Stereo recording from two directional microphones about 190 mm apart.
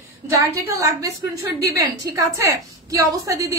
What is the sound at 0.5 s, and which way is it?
A woman's voice, 15° right (ahead or behind).